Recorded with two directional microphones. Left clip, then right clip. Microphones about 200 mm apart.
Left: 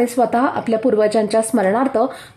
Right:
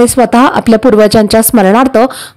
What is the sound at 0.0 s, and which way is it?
A woman's voice, 35° right (ahead or behind).